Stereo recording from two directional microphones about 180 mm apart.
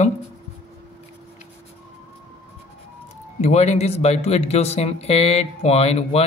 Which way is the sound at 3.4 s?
40° left (ahead or behind).